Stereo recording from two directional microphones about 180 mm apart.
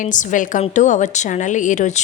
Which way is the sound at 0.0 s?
45° left (ahead or behind).